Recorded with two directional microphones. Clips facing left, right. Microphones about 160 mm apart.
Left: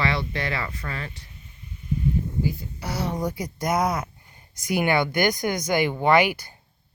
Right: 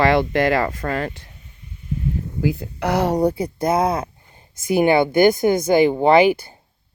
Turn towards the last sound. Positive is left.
turn(degrees=-30)  # may be behind; listen again after turning